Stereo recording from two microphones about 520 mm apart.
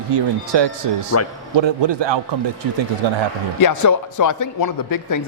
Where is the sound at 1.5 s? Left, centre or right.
Right.